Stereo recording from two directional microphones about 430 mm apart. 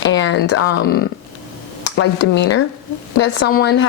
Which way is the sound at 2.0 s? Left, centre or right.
Left.